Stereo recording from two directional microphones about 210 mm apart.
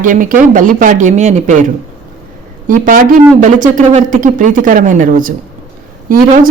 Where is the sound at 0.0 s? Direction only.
40° right (ahead or behind).